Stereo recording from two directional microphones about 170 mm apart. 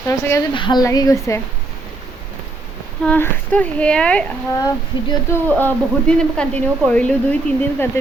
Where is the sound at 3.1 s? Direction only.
10° left (ahead or behind).